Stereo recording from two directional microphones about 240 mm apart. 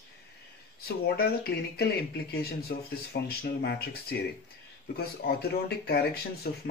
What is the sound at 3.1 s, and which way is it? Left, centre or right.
Speech, left.